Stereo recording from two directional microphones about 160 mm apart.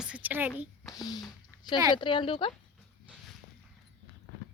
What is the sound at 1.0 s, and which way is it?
Speech, 25° left (ahead or behind).